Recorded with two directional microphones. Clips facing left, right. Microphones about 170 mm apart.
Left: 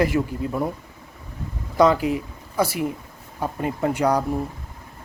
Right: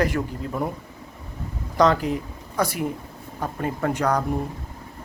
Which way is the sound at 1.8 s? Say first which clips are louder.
Left 2 dB; 5° left (ahead or behind).